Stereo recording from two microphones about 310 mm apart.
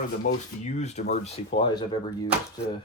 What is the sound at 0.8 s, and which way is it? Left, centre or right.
Speech, left.